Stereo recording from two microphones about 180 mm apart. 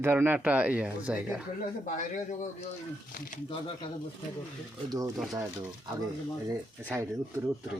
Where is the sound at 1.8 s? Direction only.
45° left (ahead or behind).